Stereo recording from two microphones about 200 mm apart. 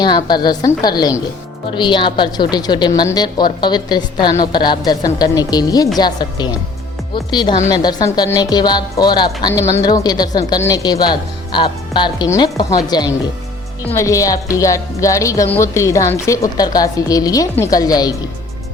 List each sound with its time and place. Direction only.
0.3 s a woman's voice: 20° left (ahead or behind)